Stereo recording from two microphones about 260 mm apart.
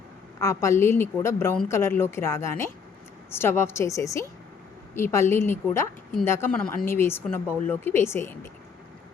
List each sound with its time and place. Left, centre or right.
0.3 s a woman's voice: centre